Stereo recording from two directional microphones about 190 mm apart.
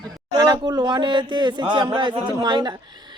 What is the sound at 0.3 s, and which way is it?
A man's voice, 20° right (ahead or behind).